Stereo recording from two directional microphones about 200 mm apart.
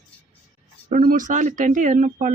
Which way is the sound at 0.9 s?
40° right (ahead or behind).